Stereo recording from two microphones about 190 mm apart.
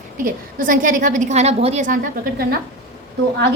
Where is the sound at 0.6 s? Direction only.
45° right (ahead or behind).